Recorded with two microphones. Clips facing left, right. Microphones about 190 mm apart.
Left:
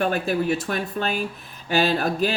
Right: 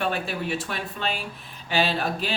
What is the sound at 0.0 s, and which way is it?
Speech, 45° left (ahead or behind).